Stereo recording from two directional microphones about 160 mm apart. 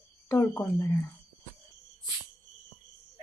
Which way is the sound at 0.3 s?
15° left (ahead or behind).